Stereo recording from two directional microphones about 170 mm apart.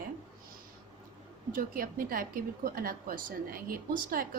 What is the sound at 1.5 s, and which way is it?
A woman's voice, 55° right (ahead or behind).